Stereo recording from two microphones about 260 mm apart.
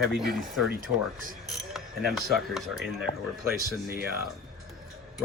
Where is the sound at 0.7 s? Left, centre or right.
Right.